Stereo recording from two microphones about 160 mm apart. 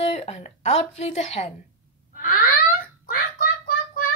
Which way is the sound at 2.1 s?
65° left (ahead or behind).